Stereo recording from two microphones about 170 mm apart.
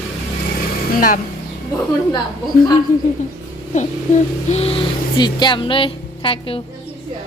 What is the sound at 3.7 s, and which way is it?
Speech, 45° left (ahead or behind).